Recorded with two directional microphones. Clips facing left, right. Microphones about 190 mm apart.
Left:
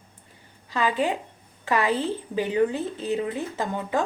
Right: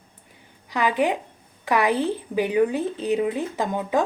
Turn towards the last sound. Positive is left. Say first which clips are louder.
# right 3 dB
turn(degrees=-15)  # may be behind; listen again after turning